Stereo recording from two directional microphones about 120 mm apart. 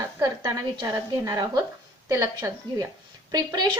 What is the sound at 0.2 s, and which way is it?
A woman's voice, 30° right (ahead or behind).